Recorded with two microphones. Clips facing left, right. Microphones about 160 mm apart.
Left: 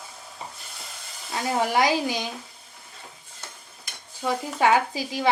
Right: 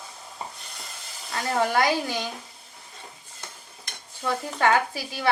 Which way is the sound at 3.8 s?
10° left (ahead or behind).